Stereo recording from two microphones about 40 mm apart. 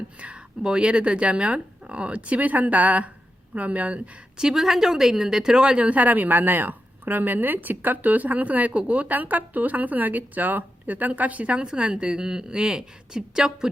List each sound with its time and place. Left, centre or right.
0.2 s a sound: right
0.6 s speech: right
4.4 s speech: centre
5.9 s a woman's voice: right
11.6 s a woman's voice: right